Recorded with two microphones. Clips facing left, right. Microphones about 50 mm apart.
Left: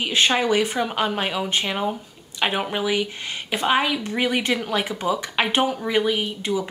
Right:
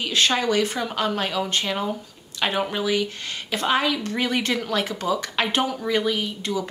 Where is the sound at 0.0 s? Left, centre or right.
Centre.